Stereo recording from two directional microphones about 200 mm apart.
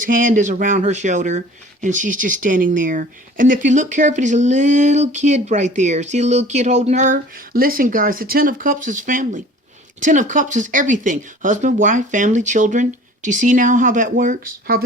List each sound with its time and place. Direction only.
0.0 s speech: 45° right (ahead or behind)